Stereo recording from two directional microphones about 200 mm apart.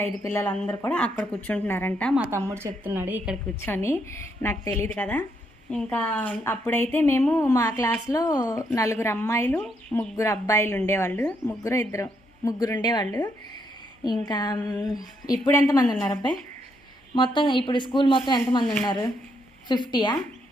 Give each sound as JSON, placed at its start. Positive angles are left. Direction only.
{"t": 0.0, "sound": "a woman's voice", "side_deg": 10}
{"t": 2.1, "sound": "a woman's voice", "side_deg": -10}
{"t": 3.5, "sound": "a woman's voice", "side_deg": 10}
{"t": 17.2, "sound": "a woman's voice", "side_deg": 25}
{"t": 18.6, "sound": "speech", "side_deg": 0}
{"t": 18.9, "sound": "a woman's voice", "side_deg": 20}